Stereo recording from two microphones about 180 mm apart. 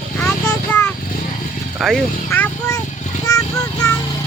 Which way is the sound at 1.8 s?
Centre (ahead or behind).